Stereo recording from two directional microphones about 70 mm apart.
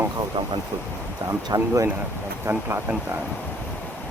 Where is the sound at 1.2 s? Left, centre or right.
Right.